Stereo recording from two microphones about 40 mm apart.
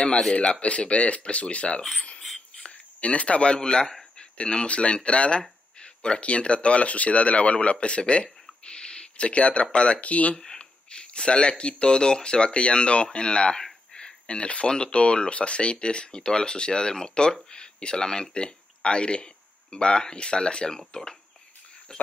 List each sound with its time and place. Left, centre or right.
0.5 s speech: left
3.0 s speech: left
4.2 s a sound: left
4.6 s speech: left
10.3 s speech: centre
13.9 s a sound: left
14.7 s speech: left